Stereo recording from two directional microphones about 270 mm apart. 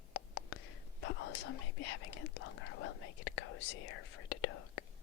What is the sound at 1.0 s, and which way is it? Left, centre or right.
Speech, left.